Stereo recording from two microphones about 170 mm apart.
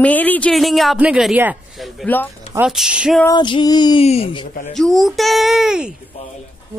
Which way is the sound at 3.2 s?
25° left (ahead or behind).